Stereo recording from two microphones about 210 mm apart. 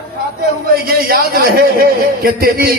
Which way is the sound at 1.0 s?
45° right (ahead or behind).